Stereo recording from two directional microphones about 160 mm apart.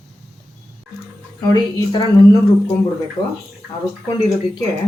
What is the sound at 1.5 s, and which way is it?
Speech, 25° left (ahead or behind).